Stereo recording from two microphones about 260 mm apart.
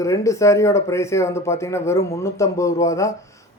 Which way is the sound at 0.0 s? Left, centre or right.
Centre.